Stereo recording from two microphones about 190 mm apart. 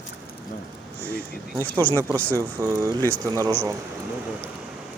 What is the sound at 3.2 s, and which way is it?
Speech, 20° right (ahead or behind).